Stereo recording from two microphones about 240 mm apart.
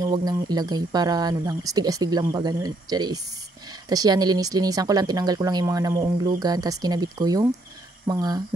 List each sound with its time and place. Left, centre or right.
0.0 s speech: centre